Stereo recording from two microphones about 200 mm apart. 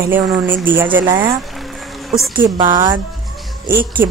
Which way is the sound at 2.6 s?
20° right (ahead or behind).